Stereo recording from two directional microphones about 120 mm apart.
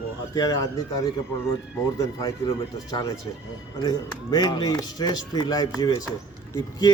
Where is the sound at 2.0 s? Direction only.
30° left (ahead or behind).